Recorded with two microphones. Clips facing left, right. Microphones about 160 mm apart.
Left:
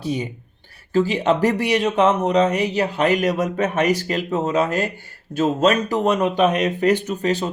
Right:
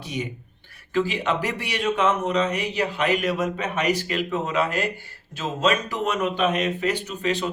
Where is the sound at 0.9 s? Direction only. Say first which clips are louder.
Left 6 dB; 40° left (ahead or behind).